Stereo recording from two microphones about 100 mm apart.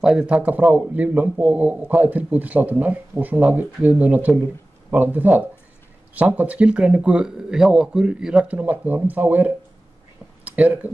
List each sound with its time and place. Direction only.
0.0 s a man's voice: 10° right (ahead or behind)